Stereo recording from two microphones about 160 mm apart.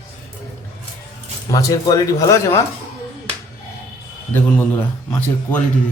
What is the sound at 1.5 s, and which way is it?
Speech, 20° left (ahead or behind).